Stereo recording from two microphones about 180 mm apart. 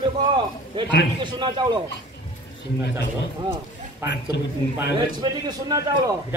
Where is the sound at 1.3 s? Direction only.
25° right (ahead or behind).